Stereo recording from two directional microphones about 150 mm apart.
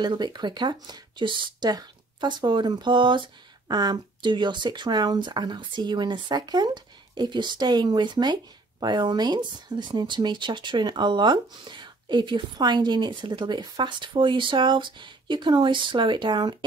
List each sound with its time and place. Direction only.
0.0 s speech: 30° right (ahead or behind)